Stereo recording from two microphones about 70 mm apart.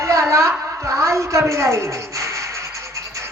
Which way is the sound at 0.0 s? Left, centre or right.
Right.